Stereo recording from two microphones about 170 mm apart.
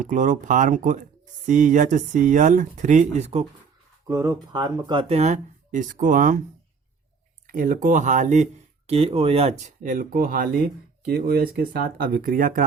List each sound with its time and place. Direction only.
0.0 s speech: 50° right (ahead or behind)
4.0 s speech: 20° right (ahead or behind); by 6.4 s 50° right (ahead or behind)
7.4 s speech: 55° right (ahead or behind)